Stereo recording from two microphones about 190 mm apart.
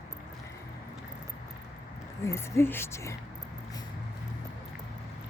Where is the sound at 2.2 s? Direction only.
15° left (ahead or behind).